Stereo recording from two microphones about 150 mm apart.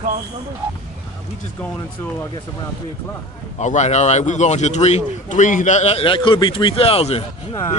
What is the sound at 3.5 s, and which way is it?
Speech, 50° left (ahead or behind).